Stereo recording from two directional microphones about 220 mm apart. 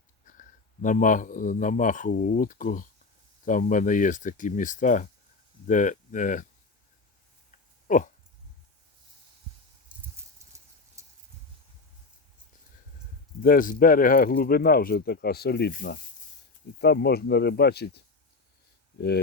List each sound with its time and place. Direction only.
0.3 s speech: 35° left (ahead or behind)
7.9 s dog: 35° left (ahead or behind)
10.5 s a sound: 15° right (ahead or behind)
13.4 s speech: 40° left (ahead or behind)